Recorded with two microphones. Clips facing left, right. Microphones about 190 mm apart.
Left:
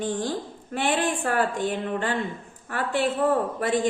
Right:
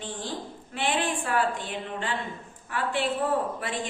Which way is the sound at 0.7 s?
45° left (ahead or behind).